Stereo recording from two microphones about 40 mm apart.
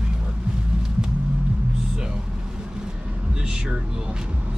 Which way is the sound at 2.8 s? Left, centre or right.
Right.